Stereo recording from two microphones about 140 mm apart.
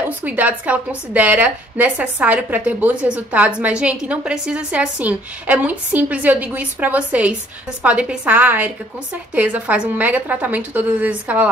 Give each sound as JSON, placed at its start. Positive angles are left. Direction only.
{"t": 0.2, "sound": "a woman's voice", "side_deg": -10}